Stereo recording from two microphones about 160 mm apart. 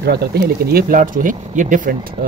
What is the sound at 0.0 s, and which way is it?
Speech, 90° right.